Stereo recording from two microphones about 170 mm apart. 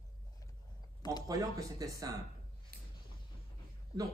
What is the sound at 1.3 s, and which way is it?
Speech, 20° right (ahead or behind).